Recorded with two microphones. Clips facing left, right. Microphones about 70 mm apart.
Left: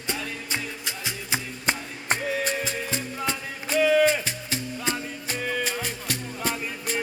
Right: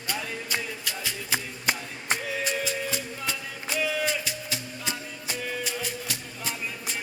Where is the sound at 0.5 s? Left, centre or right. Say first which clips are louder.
Even; left.